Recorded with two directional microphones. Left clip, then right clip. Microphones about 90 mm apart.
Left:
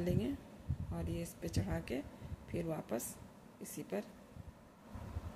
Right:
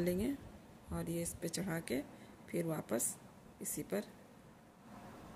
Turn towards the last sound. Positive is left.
turn(degrees=-45)  # may be behind; listen again after turning